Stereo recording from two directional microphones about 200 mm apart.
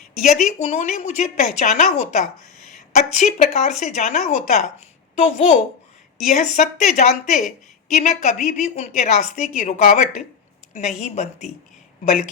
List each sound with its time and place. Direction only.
0.1 s speech: 35° left (ahead or behind)